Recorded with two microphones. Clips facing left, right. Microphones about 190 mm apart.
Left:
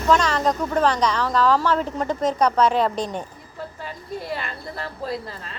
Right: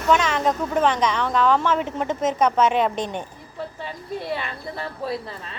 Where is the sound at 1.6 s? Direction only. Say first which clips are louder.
Left 1 dB; 20° right (ahead or behind).